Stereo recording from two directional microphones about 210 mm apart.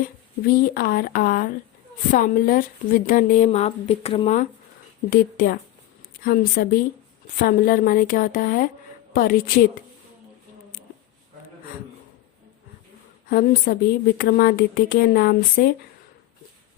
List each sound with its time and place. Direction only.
0.0 s a woman's voice: 45° left (ahead or behind)
5.1 s a woman's voice: 40° left (ahead or behind)
13.2 s a woman's voice: 45° left (ahead or behind)